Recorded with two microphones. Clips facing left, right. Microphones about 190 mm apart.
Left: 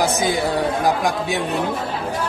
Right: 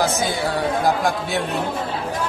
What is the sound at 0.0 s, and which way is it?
Speech, 15° left (ahead or behind).